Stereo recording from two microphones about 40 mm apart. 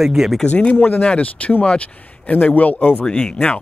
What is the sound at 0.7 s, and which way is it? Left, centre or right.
Speech, left.